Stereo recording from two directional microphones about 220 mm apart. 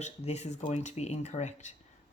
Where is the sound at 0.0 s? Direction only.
30° left (ahead or behind).